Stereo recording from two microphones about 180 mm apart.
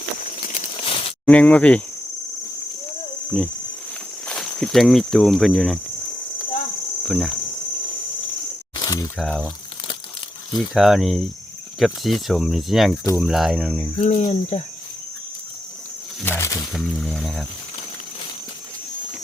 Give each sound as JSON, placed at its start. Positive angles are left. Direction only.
{"t": 0.2, "sound": "a sound", "side_deg": 45}
{"t": 0.9, "sound": "a sound", "side_deg": 30}
{"t": 1.2, "sound": "speech", "side_deg": 5}
{"t": 3.3, "sound": "speech", "side_deg": 5}
{"t": 7.1, "sound": "speech", "side_deg": 0}
{"t": 8.8, "sound": "a sound", "side_deg": 20}
{"t": 9.1, "sound": "speech", "side_deg": 0}
{"t": 10.8, "sound": "speech", "side_deg": 0}
{"t": 14.0, "sound": "speech", "side_deg": 40}
{"t": 16.2, "sound": "wild animals", "side_deg": 15}
{"t": 16.7, "sound": "speech", "side_deg": 0}